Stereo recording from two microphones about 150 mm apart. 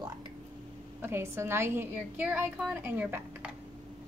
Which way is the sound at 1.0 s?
15° right (ahead or behind).